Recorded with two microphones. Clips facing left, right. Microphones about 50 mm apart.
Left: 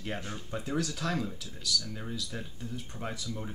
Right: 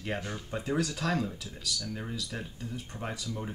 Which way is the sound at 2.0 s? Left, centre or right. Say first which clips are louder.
Right 1 dB; centre.